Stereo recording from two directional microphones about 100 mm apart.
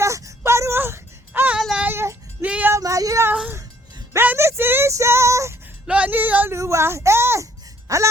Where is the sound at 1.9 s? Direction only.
25° right (ahead or behind).